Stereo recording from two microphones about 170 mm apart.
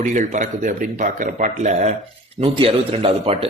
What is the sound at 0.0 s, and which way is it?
Speech, 45° right (ahead or behind).